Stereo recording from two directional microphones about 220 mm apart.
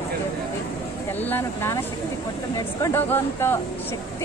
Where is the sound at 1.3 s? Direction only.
10° left (ahead or behind).